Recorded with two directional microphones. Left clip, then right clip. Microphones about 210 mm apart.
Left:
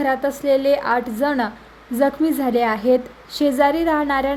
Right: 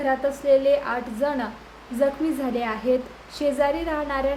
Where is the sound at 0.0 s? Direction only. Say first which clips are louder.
Left 3 dB; 45° left (ahead or behind).